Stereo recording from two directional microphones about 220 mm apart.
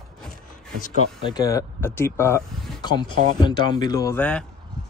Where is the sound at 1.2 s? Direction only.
15° left (ahead or behind).